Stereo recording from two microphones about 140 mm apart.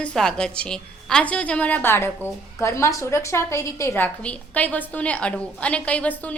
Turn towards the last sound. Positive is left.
turn(degrees=10)  # may be behind; listen again after turning